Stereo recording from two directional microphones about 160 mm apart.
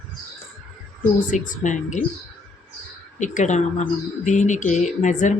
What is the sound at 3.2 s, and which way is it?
Speech, 50° left (ahead or behind).